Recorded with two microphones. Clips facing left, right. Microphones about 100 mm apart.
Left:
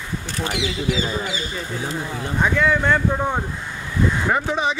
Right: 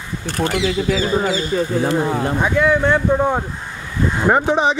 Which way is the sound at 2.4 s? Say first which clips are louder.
Right 1 dB; 15° right (ahead or behind).